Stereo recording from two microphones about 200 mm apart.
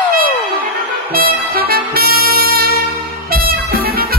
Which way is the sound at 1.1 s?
50° right (ahead or behind).